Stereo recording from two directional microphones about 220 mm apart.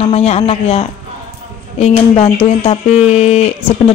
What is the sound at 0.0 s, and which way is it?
Speech, 30° left (ahead or behind).